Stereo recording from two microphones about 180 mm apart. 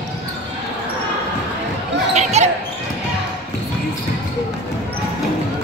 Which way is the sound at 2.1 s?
40° right (ahead or behind).